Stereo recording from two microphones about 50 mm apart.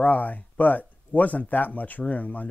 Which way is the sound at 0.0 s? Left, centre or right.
Left.